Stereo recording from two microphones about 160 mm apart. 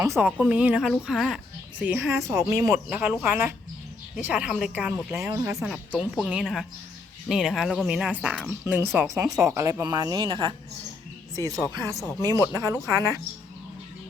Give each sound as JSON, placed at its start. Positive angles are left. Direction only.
{"t": 0.0, "sound": "speech", "side_deg": -15}
{"t": 2.6, "sound": "speech", "side_deg": -5}
{"t": 5.1, "sound": "speech", "side_deg": -20}
{"t": 5.5, "sound": "speech", "side_deg": 0}
{"t": 11.6, "sound": "speech", "side_deg": 20}
{"t": 12.2, "sound": "speech", "side_deg": -20}